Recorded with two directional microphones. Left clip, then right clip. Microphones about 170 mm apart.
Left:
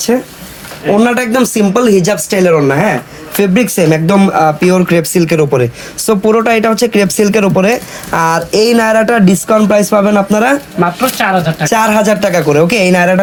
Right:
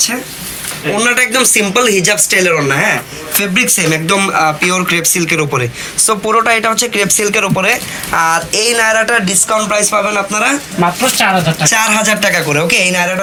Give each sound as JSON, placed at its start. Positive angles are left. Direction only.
{"t": 0.9, "sound": "speech", "side_deg": 55}
{"t": 10.8, "sound": "speech", "side_deg": 15}
{"t": 11.6, "sound": "speech", "side_deg": 50}